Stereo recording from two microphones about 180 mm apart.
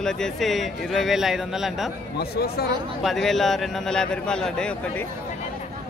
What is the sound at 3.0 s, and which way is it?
A man's voice, centre (ahead or behind).